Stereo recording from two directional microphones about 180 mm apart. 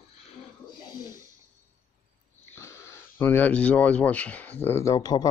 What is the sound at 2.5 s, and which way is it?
Speech, 15° left (ahead or behind).